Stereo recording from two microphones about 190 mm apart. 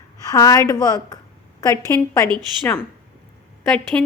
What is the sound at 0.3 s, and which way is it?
A woman's voice, 20° left (ahead or behind).